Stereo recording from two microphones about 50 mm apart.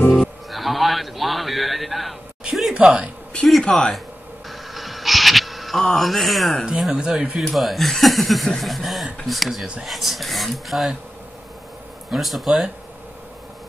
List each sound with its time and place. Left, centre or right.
0.2 s a sound: centre
2.7 s speech: centre
3.6 s speech: centre
4.5 s a sound: centre
6.8 s speech: centre
7.5 s speech: centre
12.1 s speech: centre